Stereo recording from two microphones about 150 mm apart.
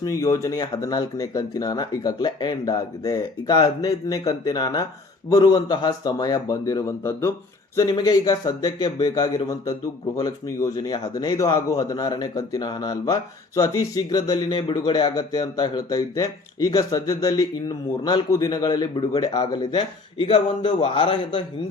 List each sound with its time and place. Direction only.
0.0 s speech: 20° left (ahead or behind)